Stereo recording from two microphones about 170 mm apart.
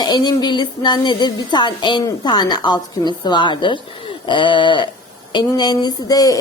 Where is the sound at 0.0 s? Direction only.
25° left (ahead or behind).